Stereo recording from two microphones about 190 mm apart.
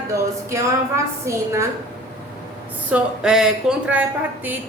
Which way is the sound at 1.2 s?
15° right (ahead or behind).